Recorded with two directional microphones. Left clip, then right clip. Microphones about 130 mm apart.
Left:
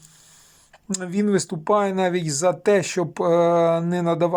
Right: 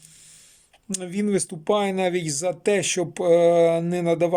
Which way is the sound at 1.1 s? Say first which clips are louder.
Left 3 dB; 20° right (ahead or behind).